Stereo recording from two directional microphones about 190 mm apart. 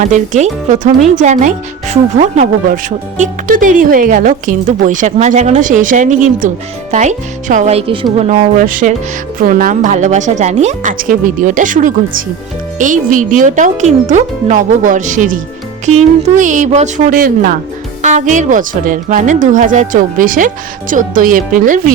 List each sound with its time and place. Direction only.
0.0 s speech: 40° right (ahead or behind)